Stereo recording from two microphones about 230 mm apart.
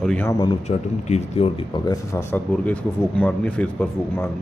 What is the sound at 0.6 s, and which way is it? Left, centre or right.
Speech, left.